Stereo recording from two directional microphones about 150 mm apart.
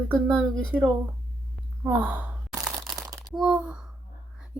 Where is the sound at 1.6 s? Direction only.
10° right (ahead or behind).